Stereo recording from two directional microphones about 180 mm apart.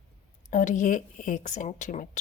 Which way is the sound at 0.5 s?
45° left (ahead or behind).